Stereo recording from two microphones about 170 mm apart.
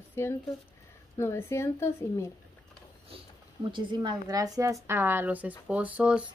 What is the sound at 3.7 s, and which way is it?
A woman's voice, 25° right (ahead or behind).